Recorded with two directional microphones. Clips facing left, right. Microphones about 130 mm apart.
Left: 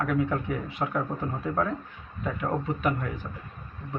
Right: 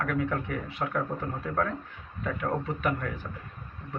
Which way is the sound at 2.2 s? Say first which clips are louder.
Left 1 dB; 15° left (ahead or behind).